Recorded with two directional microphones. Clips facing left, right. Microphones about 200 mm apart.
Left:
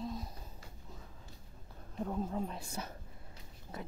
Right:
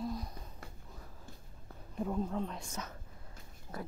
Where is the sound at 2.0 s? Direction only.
5° left (ahead or behind).